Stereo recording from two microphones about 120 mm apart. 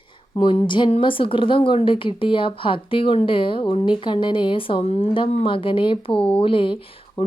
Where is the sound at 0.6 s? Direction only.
40° left (ahead or behind).